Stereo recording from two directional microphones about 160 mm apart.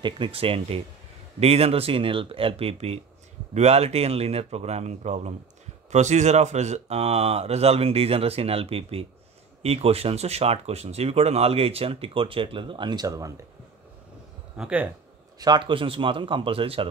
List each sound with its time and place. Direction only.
0.0 s speech: 35° right (ahead or behind)
14.6 s speech: 10° right (ahead or behind)
15.3 s speech: 25° right (ahead or behind)